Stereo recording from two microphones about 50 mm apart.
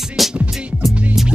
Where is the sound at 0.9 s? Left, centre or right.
Right.